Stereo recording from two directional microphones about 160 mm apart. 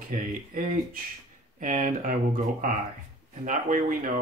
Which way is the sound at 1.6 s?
50° right (ahead or behind).